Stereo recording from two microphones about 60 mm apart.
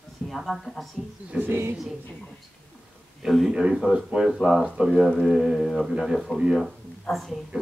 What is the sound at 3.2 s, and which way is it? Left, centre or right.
Speech, centre.